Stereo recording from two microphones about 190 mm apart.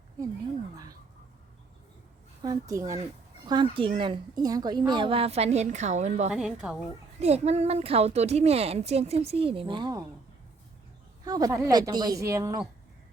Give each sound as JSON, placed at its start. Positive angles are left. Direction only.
{"t": 2.4, "sound": "a woman's voice", "side_deg": -20}
{"t": 6.3, "sound": "a woman's voice", "side_deg": -5}
{"t": 7.2, "sound": "a woman's voice", "side_deg": -35}
{"t": 11.3, "sound": "a woman's voice", "side_deg": -20}